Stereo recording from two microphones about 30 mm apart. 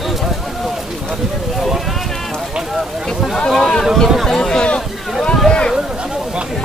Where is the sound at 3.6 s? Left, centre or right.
Centre.